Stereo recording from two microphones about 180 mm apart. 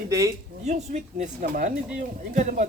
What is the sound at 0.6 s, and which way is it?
Speech, 40° right (ahead or behind).